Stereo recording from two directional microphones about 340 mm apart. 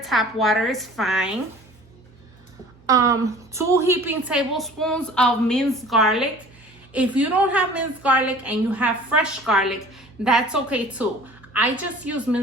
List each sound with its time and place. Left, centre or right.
0.0 s a woman's voice: centre
2.8 s a woman's voice: centre